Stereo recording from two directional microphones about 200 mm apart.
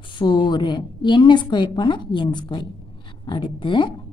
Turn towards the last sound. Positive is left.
turn(degrees=25)  # may be behind; listen again after turning